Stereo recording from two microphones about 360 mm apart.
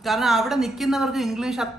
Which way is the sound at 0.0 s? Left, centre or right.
Centre.